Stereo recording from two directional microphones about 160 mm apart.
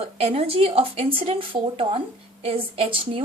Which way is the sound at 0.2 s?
40° right (ahead or behind).